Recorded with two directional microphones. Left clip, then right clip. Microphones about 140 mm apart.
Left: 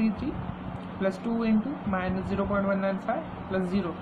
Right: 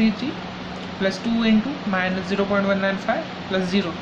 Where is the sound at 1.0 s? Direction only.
15° left (ahead or behind).